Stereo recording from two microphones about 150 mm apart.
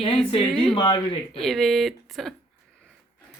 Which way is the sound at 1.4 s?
Centre (ahead or behind).